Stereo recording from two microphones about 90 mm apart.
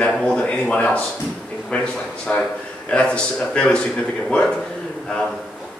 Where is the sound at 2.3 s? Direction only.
20° left (ahead or behind).